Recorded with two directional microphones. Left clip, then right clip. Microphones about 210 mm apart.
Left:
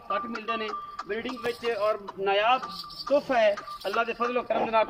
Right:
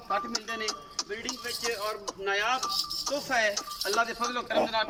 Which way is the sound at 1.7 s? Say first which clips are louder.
Left 6 dB; 15° left (ahead or behind).